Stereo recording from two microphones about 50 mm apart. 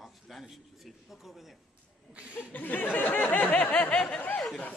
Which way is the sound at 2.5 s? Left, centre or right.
Left.